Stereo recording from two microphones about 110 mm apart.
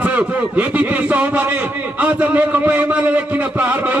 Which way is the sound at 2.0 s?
15° right (ahead or behind).